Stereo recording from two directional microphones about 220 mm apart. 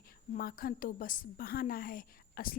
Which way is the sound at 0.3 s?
40° left (ahead or behind).